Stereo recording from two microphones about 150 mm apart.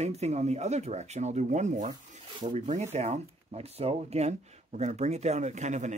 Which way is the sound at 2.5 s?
55° right (ahead or behind).